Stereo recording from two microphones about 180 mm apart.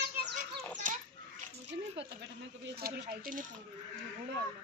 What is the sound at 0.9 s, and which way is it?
Children playing, 45° right (ahead or behind).